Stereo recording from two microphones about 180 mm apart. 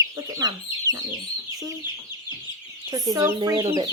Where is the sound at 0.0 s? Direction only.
20° right (ahead or behind).